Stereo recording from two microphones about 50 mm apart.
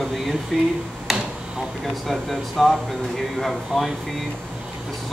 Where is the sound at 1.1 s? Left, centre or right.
Centre.